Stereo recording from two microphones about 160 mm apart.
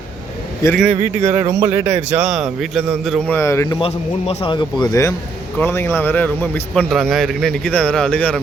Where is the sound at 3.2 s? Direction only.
15° left (ahead or behind).